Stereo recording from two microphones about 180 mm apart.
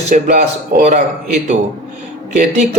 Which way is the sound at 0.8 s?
40° right (ahead or behind).